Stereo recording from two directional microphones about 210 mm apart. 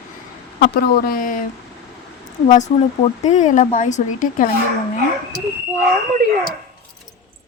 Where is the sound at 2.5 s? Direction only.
35° left (ahead or behind).